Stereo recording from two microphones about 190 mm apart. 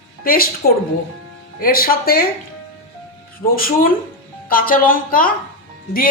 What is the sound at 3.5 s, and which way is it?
Speech, 50° left (ahead or behind).